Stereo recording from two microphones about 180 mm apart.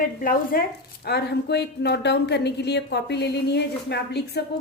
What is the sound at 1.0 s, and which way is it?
A woman's voice, 65° left (ahead or behind).